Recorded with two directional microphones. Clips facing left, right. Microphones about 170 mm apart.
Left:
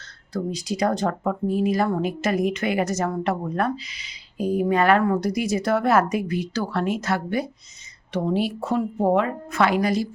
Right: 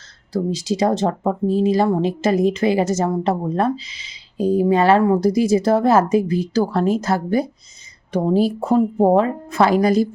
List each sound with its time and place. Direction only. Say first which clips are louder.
0.7 s a woman's voice: right 4 dB; 25° right (ahead or behind)